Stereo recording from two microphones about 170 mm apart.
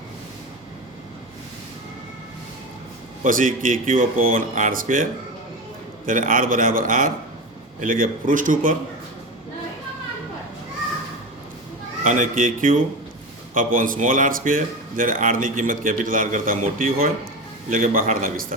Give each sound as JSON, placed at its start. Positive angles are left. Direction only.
{"t": 3.2, "sound": "speech", "side_deg": -55}
{"t": 6.1, "sound": "a man's voice", "side_deg": -55}
{"t": 12.0, "sound": "a man's voice", "side_deg": -50}